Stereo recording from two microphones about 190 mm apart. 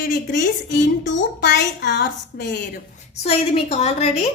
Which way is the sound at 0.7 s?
70° left (ahead or behind).